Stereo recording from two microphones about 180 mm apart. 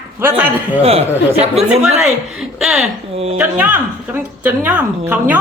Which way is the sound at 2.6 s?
5° right (ahead or behind).